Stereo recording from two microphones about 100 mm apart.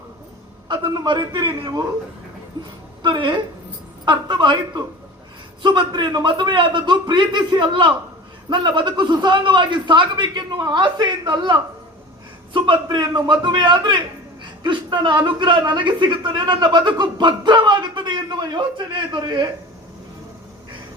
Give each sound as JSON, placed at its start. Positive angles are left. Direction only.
{"t": 0.7, "sound": "a man's voice", "side_deg": -50}
{"t": 3.0, "sound": "a man's voice", "side_deg": -55}